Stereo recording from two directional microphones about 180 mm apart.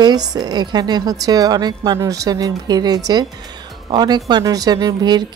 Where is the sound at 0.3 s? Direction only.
20° right (ahead or behind).